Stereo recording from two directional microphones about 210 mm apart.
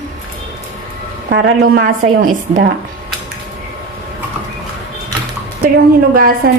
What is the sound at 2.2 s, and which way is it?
Speech, 40° right (ahead or behind).